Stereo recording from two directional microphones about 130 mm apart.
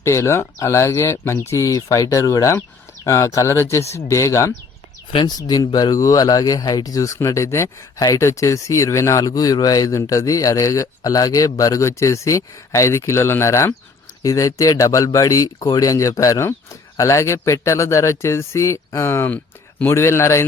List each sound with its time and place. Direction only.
0.0 s speech: 20° left (ahead or behind)